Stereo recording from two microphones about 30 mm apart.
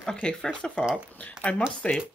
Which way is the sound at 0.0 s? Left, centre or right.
Left.